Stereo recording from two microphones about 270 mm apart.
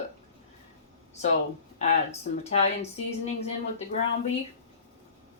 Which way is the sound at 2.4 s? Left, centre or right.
Left.